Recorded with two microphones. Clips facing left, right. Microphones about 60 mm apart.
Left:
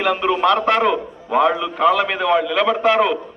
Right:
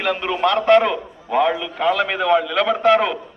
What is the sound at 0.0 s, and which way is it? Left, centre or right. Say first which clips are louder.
A man's voice: left 3 dB; centre.